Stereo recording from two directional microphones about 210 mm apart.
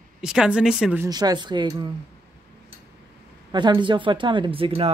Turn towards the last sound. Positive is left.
turn(degrees=-25)  # may be behind; listen again after turning